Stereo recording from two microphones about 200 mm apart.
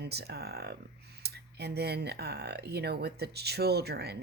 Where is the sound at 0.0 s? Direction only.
55° right (ahead or behind).